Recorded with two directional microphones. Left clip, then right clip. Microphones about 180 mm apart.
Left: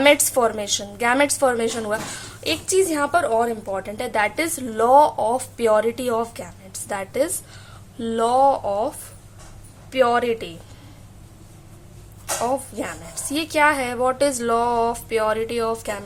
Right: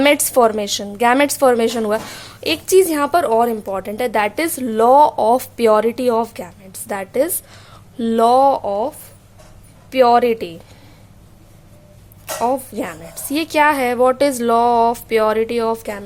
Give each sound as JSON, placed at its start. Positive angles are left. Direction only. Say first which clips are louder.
{"t": 0.0, "sound": "a woman's voice", "louder": "right 3 dB", "side_deg": -35}
{"t": 12.2, "sound": "a woman's voice", "louder": "right 4 dB", "side_deg": -30}